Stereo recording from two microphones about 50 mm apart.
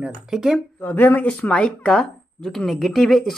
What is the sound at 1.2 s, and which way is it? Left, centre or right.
Speech, left.